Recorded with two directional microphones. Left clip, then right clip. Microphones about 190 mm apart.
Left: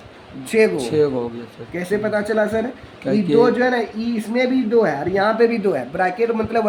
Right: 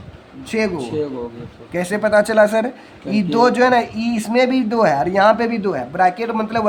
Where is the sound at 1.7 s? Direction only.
30° right (ahead or behind).